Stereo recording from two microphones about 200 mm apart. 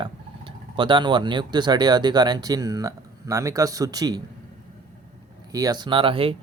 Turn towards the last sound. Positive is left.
turn(degrees=-25)  # may be behind; listen again after turning